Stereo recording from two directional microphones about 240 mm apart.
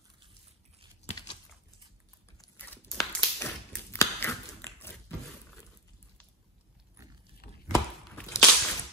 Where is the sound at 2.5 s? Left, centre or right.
Centre.